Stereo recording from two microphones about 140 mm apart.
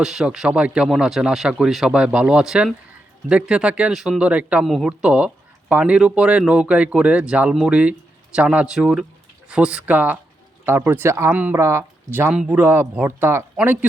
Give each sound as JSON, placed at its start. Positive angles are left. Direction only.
{"t": 0.0, "sound": "speech", "side_deg": -5}
{"t": 12.3, "sound": "speech", "side_deg": -10}